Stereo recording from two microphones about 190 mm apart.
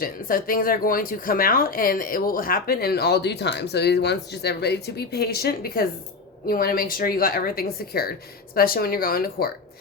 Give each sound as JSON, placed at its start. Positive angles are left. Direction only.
{"t": 0.0, "sound": "speech", "side_deg": 50}